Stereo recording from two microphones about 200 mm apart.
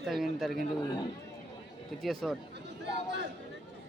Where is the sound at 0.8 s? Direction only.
20° left (ahead or behind).